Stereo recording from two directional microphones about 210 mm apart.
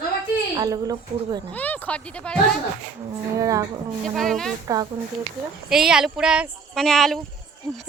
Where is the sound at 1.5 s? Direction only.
10° left (ahead or behind).